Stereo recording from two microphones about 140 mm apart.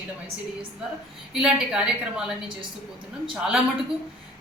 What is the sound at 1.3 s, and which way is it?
A woman's voice, 5° right (ahead or behind).